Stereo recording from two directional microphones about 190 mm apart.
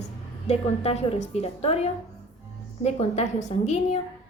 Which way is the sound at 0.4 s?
35° left (ahead or behind).